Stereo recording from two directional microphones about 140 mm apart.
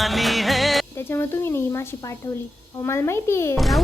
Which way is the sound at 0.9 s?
15° left (ahead or behind).